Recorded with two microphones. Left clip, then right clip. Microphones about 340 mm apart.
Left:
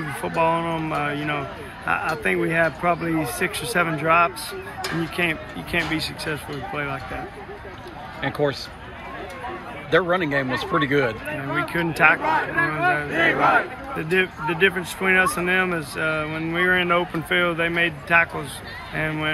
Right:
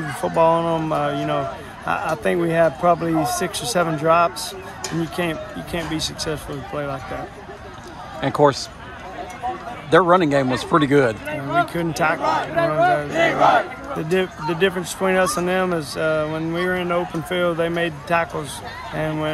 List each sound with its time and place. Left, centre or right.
0.2 s speech: centre
8.2 s speech: centre
9.8 s speech: centre